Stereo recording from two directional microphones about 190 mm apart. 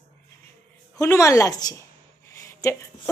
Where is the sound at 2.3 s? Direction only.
15° left (ahead or behind).